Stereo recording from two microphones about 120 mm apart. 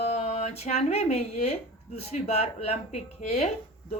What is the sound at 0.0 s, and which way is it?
A woman's voice, 65° left (ahead or behind).